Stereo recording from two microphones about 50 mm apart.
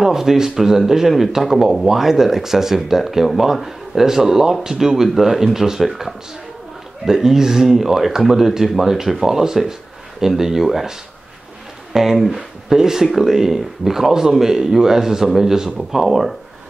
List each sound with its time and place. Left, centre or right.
0.0 s speech: centre